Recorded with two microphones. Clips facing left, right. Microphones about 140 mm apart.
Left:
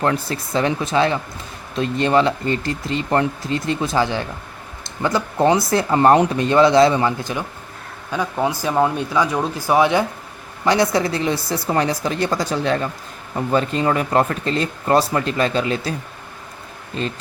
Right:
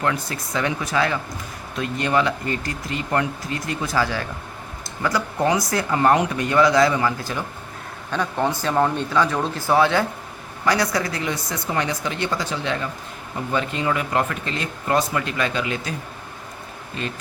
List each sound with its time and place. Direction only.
0.0 s speech: 30° left (ahead or behind)
8.1 s speech: 10° left (ahead or behind); by 16.0 s 35° left (ahead or behind)